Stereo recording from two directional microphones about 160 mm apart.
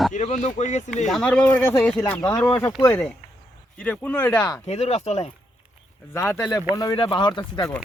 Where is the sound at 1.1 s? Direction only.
5° left (ahead or behind).